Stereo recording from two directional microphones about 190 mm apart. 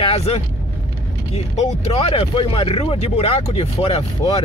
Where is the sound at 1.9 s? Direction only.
30° left (ahead or behind).